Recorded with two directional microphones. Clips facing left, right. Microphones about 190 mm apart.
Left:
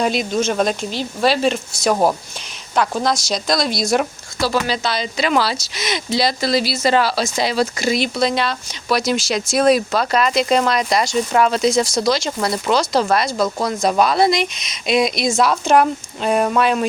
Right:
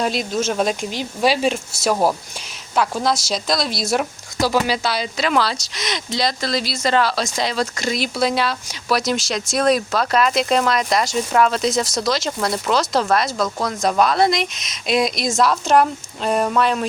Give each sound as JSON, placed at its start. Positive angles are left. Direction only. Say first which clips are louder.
{"t": 0.0, "sound": "speech", "louder": "left 2 dB", "side_deg": 0}
{"t": 4.4, "sound": "speech", "louder": "right 1 dB", "side_deg": -15}